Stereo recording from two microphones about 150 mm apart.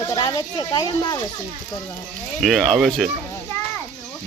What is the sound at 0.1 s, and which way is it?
Speech, 25° left (ahead or behind).